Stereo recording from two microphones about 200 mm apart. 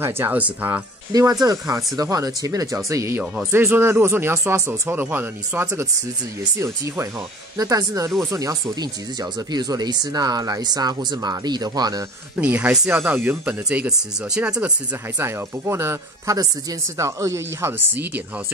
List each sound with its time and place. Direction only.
0.0 s speech: 10° right (ahead or behind)
12.4 s speech: 10° right (ahead or behind)